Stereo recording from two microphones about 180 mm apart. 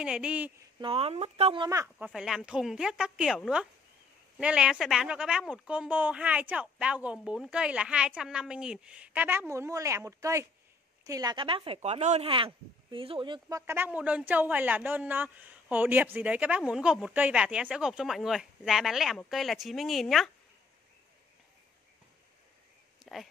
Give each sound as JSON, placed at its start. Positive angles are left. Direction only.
{"t": 0.0, "sound": "a woman's voice", "side_deg": -5}
{"t": 0.7, "sound": "speech", "side_deg": -30}
{"t": 1.7, "sound": "a woman's voice", "side_deg": -15}
{"t": 23.0, "sound": "a sound", "side_deg": 0}